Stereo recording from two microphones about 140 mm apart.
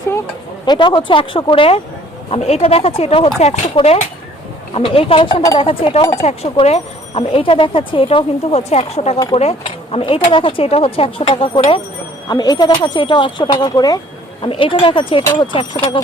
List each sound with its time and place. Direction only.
0.6 s speech: 35° left (ahead or behind)
12.3 s speech: 30° left (ahead or behind)